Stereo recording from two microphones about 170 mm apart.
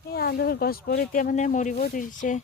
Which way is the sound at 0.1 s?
70° left (ahead or behind).